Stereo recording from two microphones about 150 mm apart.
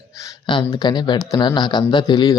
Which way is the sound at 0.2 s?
25° left (ahead or behind).